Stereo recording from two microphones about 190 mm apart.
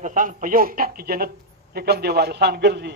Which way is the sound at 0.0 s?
40° right (ahead or behind).